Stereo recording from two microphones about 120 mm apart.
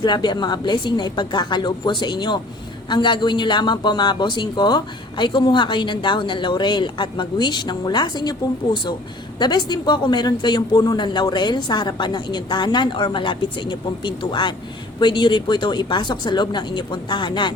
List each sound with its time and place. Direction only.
0.0 s a man's voice: 40° left (ahead or behind)